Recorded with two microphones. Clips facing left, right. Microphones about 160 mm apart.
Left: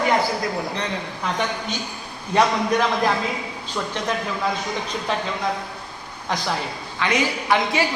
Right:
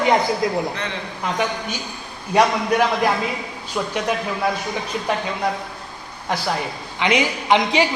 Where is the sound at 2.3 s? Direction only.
10° right (ahead or behind).